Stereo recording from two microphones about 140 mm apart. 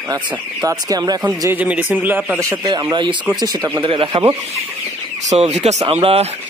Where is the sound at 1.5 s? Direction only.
10° right (ahead or behind).